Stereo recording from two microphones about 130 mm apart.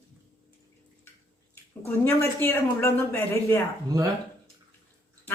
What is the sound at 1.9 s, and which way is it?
A woman's voice, 20° left (ahead or behind).